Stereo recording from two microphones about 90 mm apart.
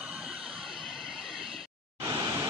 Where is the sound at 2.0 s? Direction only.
45° right (ahead or behind).